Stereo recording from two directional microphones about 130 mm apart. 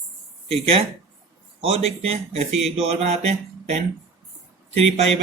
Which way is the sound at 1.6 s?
50° right (ahead or behind).